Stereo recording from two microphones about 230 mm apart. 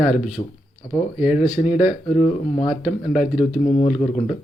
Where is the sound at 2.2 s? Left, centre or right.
Left.